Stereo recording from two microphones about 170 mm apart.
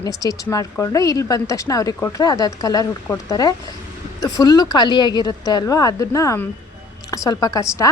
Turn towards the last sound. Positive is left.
turn(degrees=20)  # may be behind; listen again after turning